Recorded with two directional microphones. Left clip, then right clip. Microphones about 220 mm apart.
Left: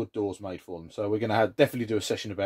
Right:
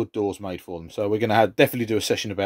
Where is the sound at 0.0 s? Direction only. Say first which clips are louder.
Right 5 dB; 40° right (ahead or behind).